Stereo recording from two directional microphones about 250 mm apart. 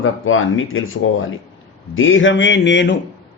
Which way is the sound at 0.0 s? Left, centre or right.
Left.